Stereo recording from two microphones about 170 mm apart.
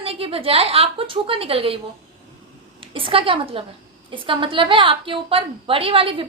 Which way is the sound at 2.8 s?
30° right (ahead or behind).